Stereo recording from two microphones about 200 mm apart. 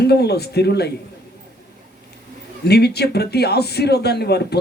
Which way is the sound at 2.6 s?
55° left (ahead or behind).